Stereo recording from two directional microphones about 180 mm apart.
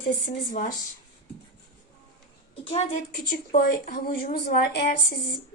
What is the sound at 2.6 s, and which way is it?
Speech, 35° left (ahead or behind).